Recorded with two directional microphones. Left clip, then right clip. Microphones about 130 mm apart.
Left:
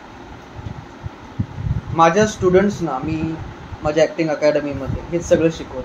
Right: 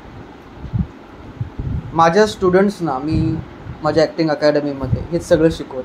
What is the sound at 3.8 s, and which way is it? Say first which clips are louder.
Speech: right 1 dB; 50° right (ahead or behind).